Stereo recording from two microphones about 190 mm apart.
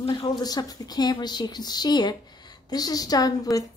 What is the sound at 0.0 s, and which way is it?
A woman's voice, 25° left (ahead or behind).